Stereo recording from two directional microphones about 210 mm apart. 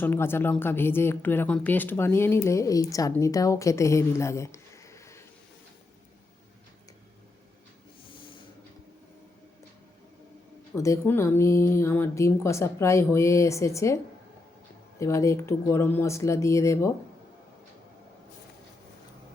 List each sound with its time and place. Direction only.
0.0 s speech: 10° left (ahead or behind)
8.1 s a sound: 25° left (ahead or behind)
10.8 s speech: 15° left (ahead or behind)